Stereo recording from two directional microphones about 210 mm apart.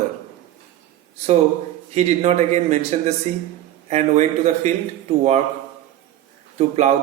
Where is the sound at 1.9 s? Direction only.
30° right (ahead or behind).